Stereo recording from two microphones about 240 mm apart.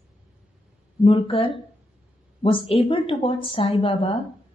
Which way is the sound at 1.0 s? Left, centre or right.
Left.